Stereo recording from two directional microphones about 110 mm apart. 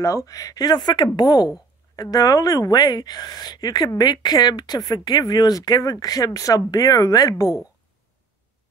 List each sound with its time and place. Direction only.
0.0 s speech: 30° left (ahead or behind)